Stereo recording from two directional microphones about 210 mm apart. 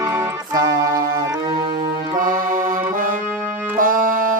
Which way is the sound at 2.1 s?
40° right (ahead or behind).